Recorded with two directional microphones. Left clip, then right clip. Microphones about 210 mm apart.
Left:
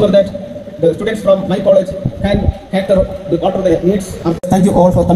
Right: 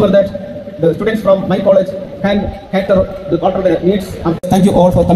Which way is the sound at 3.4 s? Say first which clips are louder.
Even; 25° right (ahead or behind).